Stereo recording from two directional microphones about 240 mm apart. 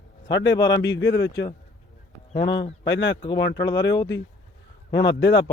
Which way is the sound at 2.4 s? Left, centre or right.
Left.